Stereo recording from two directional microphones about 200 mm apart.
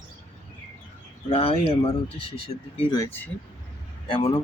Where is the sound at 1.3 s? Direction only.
30° left (ahead or behind).